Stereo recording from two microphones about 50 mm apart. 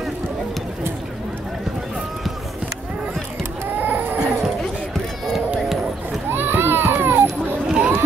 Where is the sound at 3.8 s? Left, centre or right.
Right.